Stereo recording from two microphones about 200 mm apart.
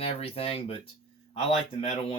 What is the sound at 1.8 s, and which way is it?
Speech, 30° left (ahead or behind).